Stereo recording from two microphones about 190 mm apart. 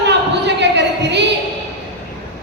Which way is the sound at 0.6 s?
65° right (ahead or behind).